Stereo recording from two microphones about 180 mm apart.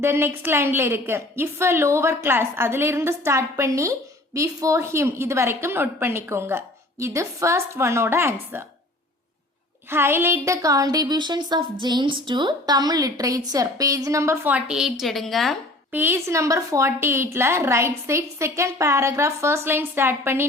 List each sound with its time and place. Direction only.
0.0 s a woman's voice: 15° right (ahead or behind)
9.9 s a woman's voice: 15° right (ahead or behind)
15.9 s a woman's voice: 10° right (ahead or behind)